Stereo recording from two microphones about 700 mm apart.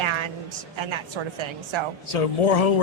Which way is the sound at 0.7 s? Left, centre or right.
Right.